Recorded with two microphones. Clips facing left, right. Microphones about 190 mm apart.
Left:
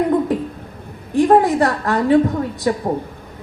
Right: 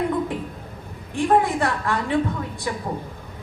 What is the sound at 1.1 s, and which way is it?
A woman's voice, 40° left (ahead or behind).